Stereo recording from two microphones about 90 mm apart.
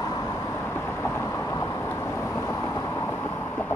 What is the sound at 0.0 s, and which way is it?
Vehicle, 35° left (ahead or behind).